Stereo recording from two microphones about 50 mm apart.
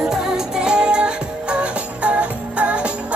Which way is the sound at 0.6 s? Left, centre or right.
Centre.